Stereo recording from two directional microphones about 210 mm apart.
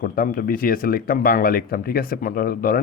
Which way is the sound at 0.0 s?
45° left (ahead or behind).